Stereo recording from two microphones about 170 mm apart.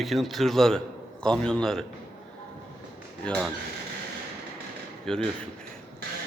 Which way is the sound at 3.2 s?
5° left (ahead or behind).